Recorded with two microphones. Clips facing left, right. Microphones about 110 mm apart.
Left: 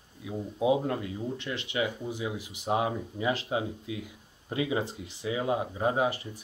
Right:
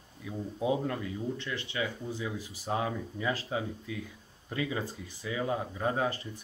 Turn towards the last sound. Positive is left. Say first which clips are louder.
# left 3 dB
turn(degrees=15)  # may be behind; listen again after turning